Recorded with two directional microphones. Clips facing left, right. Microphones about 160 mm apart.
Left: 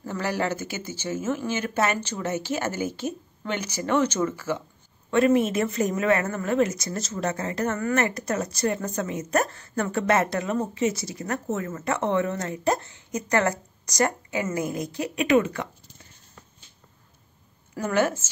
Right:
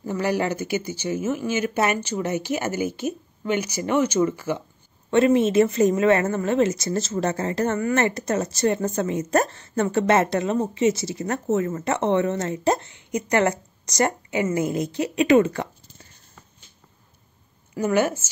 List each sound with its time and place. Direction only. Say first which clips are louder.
0.0 s a woman's voice: right 4 dB; 15° right (ahead or behind); by 15.7 s 35° right (ahead or behind)
17.7 s speech: right 3 dB; 10° right (ahead or behind)